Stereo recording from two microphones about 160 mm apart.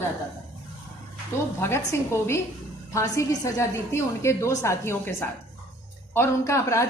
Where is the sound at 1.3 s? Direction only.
15° left (ahead or behind).